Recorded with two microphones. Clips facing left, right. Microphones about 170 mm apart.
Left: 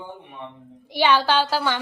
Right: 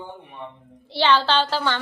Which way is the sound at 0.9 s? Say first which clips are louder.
Even; 10° left (ahead or behind).